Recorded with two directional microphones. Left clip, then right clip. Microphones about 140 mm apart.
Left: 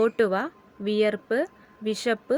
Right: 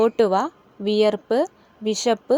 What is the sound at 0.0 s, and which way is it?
Speech, 20° right (ahead or behind).